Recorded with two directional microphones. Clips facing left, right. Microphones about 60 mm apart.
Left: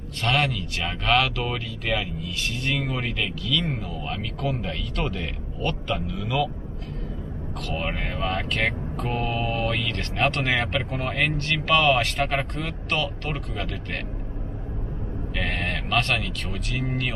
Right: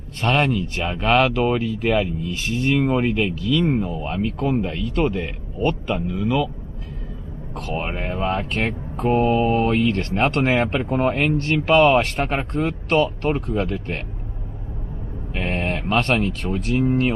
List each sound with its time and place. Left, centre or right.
0.2 s speech: right
7.6 s speech: right
15.3 s speech: right